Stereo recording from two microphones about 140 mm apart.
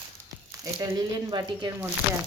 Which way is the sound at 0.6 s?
30° right (ahead or behind).